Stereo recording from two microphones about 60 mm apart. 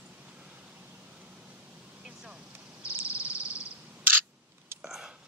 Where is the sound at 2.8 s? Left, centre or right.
Right.